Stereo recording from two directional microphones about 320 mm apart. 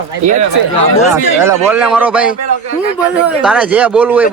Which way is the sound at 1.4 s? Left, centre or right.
Centre.